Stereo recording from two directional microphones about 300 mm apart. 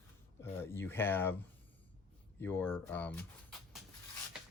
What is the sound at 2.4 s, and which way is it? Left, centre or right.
Speech, centre.